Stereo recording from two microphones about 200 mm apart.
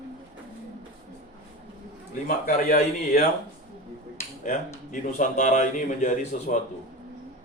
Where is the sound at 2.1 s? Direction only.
45° left (ahead or behind).